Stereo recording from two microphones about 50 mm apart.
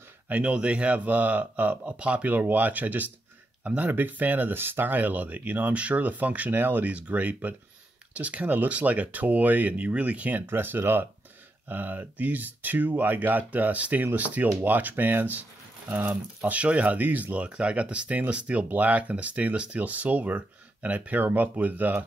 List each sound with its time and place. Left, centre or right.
0.3 s speech: right
2.3 s speech: right
10.4 s speech: right
16.3 s speech: right